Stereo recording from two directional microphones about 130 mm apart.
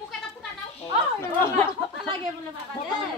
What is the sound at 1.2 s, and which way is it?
Chatter, 20° left (ahead or behind).